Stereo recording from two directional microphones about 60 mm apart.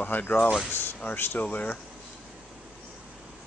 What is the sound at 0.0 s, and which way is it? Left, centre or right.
Speech, left.